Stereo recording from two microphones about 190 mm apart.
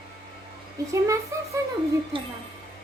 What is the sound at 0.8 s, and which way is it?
Speech, 15° right (ahead or behind).